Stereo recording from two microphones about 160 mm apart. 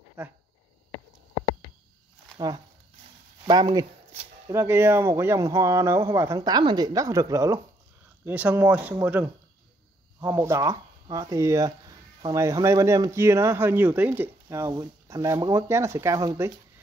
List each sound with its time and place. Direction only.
0.2 s speech: 10° right (ahead or behind)
2.3 s speech: 25° right (ahead or behind)
4.1 s speech: 15° right (ahead or behind)
8.3 s speech: 10° right (ahead or behind)